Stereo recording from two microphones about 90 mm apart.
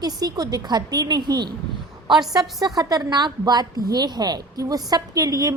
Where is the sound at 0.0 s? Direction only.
45° right (ahead or behind).